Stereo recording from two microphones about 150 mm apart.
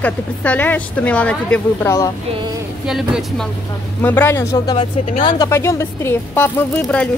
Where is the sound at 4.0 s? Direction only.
15° left (ahead or behind).